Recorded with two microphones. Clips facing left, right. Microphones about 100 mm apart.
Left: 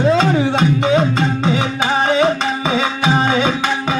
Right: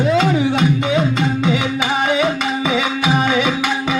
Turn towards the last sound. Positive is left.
turn(degrees=35)  # may be behind; listen again after turning